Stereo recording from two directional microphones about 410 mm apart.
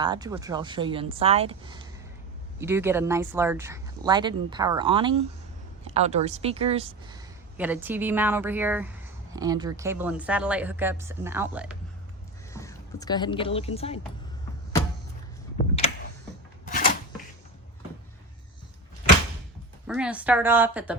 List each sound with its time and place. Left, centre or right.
0.0 s speech: centre
12.5 s speech: centre
16.6 s a sound: centre
19.9 s speech: centre